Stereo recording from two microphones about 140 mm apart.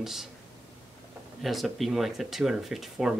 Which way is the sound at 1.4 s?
Centre (ahead or behind).